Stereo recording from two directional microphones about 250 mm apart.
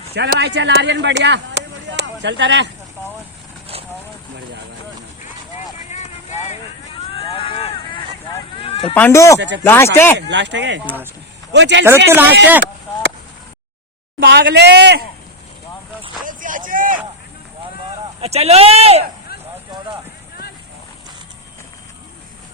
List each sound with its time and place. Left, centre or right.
0.1 s speech: right
5.9 s vehicle: left
8.5 s a sound: left
9.0 s speech: centre
10.2 s speech: right
10.8 s speech: centre
11.5 s speech: right
11.9 s speech: centre
14.3 s speech: right
16.2 s a sound: right
18.2 s speech: right